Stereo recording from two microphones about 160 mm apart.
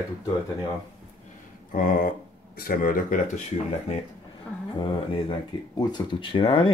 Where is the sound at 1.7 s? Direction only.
60° left (ahead or behind).